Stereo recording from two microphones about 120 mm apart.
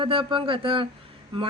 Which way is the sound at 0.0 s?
45° right (ahead or behind).